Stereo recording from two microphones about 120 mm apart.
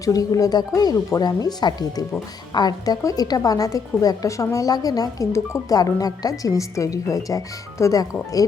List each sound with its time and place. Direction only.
0.0 s a woman's voice: 30° left (ahead or behind)